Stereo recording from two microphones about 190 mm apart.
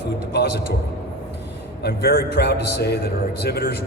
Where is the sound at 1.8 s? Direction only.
60° left (ahead or behind).